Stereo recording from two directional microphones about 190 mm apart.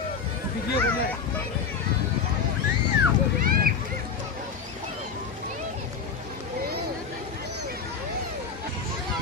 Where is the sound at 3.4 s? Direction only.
50° right (ahead or behind).